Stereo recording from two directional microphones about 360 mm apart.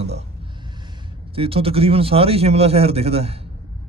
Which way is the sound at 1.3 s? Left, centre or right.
Centre.